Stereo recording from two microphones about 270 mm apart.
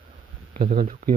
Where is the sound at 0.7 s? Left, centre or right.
Right.